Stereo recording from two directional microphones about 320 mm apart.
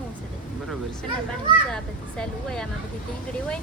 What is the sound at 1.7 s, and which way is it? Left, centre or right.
Speech, centre.